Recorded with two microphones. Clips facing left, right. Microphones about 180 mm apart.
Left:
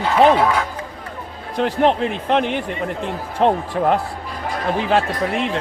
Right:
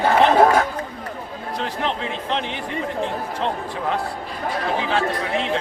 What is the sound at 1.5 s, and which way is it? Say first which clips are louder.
Speech: left 9 dB; 55° left (ahead or behind).